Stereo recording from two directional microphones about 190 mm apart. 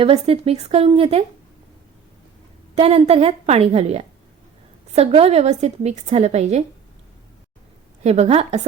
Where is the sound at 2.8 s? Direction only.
35° right (ahead or behind).